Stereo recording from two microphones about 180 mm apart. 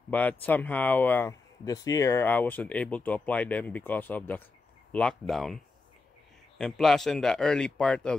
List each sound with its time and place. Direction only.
0.1 s speech: 10° left (ahead or behind)
6.6 s speech: centre (ahead or behind)